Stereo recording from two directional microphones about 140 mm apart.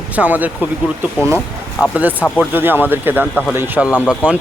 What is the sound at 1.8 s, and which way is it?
Speech, 10° right (ahead or behind).